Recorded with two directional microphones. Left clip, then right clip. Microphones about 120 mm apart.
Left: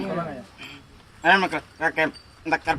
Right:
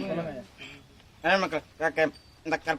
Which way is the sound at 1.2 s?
40° right (ahead or behind).